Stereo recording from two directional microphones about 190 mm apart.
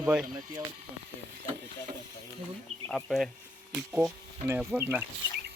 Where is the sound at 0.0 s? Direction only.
5° right (ahead or behind).